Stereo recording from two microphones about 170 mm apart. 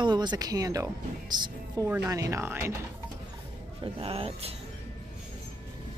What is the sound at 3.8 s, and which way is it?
Speech, 35° right (ahead or behind).